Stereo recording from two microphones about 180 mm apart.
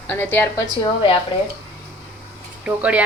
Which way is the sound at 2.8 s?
10° right (ahead or behind).